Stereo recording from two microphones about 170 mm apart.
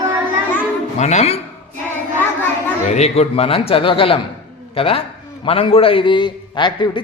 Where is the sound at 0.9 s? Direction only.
40° left (ahead or behind).